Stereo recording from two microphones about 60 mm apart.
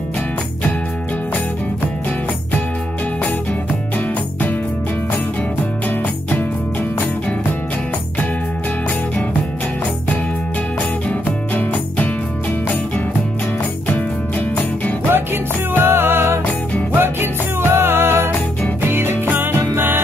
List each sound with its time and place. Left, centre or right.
11.1 s music: left
15.7 s music: right
19.5 s music: right